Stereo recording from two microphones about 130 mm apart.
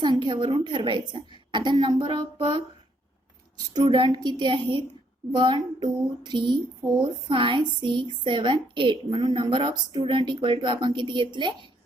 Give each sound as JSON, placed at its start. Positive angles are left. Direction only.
{"t": 0.0, "sound": "a woman's voice", "side_deg": -35}
{"t": 3.8, "sound": "a woman's voice", "side_deg": -40}